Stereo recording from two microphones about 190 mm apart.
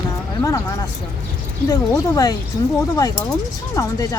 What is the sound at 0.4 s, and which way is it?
Speech, 15° left (ahead or behind).